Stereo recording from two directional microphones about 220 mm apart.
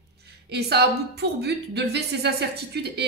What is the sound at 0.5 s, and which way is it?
Speech, 50° right (ahead or behind).